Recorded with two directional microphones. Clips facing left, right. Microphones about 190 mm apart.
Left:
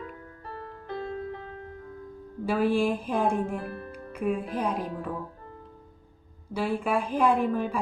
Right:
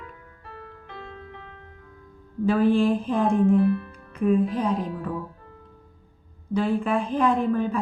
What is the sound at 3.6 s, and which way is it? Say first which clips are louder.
Speech: right 14 dB; 40° left (ahead or behind).